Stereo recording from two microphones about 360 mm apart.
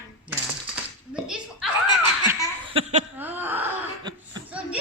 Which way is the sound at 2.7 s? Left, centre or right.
Centre.